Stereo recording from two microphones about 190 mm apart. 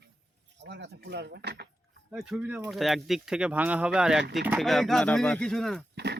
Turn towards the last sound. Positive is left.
turn(degrees=-60)  # may be behind; listen again after turning